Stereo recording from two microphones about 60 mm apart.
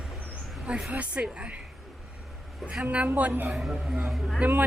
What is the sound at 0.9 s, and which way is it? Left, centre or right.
Speech, right.